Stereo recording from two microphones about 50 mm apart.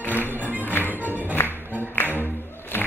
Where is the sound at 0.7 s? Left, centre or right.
Left.